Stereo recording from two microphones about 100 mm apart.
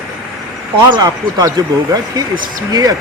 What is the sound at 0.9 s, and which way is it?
Speech, 40° right (ahead or behind).